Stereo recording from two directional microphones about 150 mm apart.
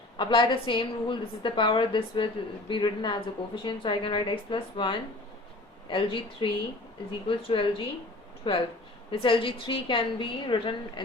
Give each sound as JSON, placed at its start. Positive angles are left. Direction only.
{"t": 0.2, "sound": "a woman's voice", "side_deg": 30}